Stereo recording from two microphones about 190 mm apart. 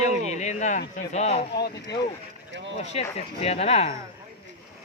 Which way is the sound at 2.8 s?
35° left (ahead or behind).